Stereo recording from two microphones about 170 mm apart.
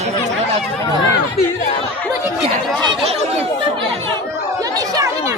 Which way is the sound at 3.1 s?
40° right (ahead or behind).